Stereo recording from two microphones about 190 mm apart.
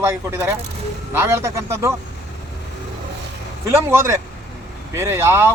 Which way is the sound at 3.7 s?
15° right (ahead or behind).